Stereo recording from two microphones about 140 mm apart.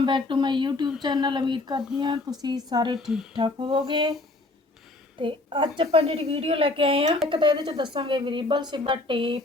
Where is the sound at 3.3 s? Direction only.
35° right (ahead or behind).